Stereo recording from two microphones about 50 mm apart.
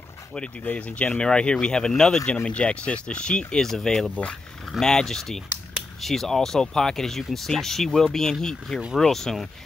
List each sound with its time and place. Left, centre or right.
0.7 s speech: left; by 4.1 s centre
4.1 s speech: left
4.7 s speech: centre